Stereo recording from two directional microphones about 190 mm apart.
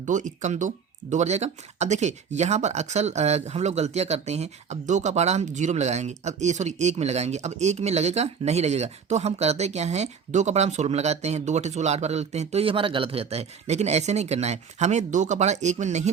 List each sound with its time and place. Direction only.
0.0 s speech: 40° right (ahead or behind)